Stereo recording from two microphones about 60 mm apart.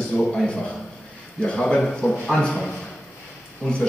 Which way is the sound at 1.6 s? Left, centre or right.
Centre.